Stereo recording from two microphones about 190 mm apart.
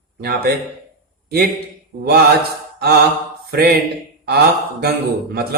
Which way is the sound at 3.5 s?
55° right (ahead or behind).